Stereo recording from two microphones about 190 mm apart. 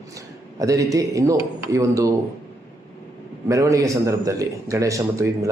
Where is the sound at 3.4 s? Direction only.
15° right (ahead or behind).